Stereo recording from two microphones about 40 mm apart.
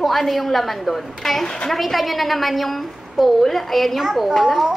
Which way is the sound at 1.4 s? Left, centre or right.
Centre.